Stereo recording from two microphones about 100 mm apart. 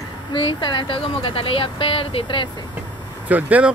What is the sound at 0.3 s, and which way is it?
A woman's voice, 55° left (ahead or behind).